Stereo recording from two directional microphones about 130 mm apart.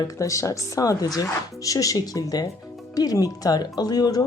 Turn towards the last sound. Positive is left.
turn(degrees=30)  # may be behind; listen again after turning